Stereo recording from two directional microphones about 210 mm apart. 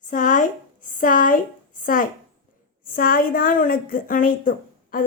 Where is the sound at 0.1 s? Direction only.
40° left (ahead or behind).